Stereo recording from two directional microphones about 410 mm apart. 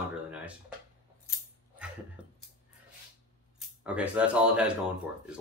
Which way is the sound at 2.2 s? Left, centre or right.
Centre.